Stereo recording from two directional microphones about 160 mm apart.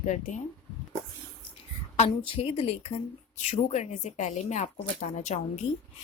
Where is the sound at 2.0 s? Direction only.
35° left (ahead or behind).